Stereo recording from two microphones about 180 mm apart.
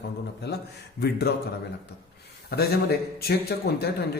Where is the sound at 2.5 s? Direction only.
60° left (ahead or behind).